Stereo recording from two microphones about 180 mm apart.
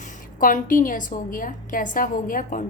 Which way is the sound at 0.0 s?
45° left (ahead or behind).